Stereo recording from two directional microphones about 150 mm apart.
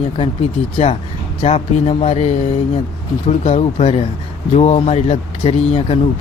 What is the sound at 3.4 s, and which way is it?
Speech, 40° left (ahead or behind).